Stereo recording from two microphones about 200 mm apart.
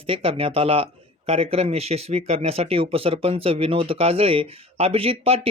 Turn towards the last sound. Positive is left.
turn(degrees=-30)  # may be behind; listen again after turning